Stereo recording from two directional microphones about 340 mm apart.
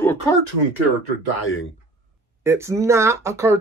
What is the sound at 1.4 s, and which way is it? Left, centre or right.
Speech, left.